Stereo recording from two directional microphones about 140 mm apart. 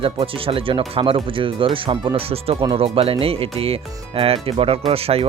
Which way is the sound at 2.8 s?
45° right (ahead or behind).